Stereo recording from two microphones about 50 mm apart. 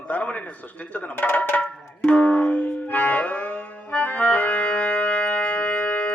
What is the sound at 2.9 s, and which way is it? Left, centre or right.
Music, left.